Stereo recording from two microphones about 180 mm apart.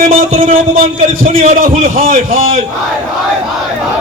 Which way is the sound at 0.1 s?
50° right (ahead or behind).